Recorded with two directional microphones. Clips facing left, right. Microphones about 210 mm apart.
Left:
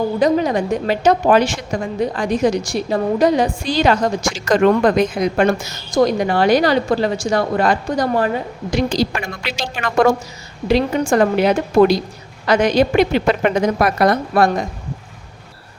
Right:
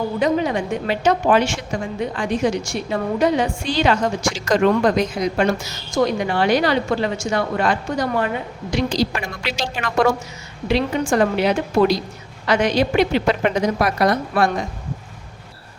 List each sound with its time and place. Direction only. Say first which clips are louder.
0.2 s a woman's voice: left 3 dB; 40° left (ahead or behind)
5.9 s a woman's voice: left 4 dB; 40° left (ahead or behind)
8.7 s a woman's voice: left 2 dB; 50° left (ahead or behind)